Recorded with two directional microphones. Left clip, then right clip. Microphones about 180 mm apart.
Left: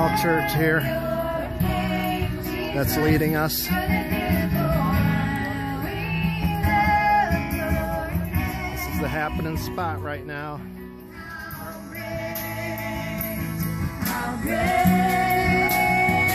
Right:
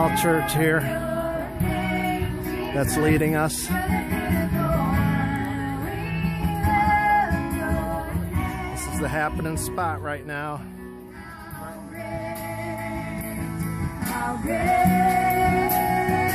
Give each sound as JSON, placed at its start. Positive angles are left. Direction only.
{"t": 0.1, "sound": "music", "side_deg": -15}
{"t": 3.0, "sound": "music", "side_deg": -10}
{"t": 4.1, "sound": "music", "side_deg": 10}
{"t": 6.7, "sound": "music", "side_deg": 15}
{"t": 9.0, "sound": "music", "side_deg": -10}
{"t": 14.6, "sound": "music", "side_deg": 15}